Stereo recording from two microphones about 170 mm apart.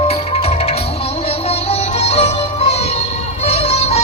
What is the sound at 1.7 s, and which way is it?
Music, 35° left (ahead or behind).